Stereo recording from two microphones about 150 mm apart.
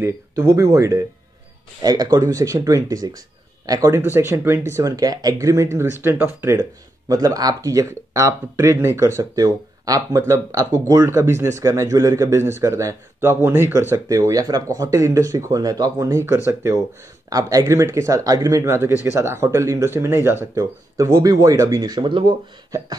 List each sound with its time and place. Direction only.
0.0 s speech: 20° right (ahead or behind)